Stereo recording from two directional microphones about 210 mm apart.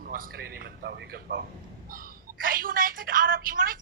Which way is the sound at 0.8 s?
50° right (ahead or behind).